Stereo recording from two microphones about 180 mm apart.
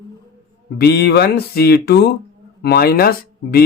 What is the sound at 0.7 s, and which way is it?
Speech, 60° left (ahead or behind).